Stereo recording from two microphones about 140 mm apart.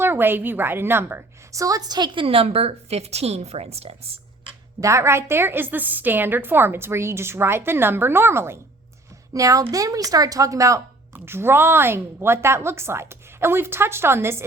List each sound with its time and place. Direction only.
0.0 s a woman's voice: 15° right (ahead or behind); by 4.2 s 45° right (ahead or behind)
4.8 s a woman's voice: 20° right (ahead or behind)